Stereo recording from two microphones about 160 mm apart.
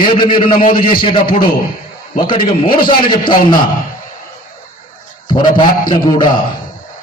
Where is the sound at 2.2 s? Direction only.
30° left (ahead or behind).